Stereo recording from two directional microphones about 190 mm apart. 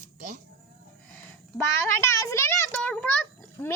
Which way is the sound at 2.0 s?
15° left (ahead or behind).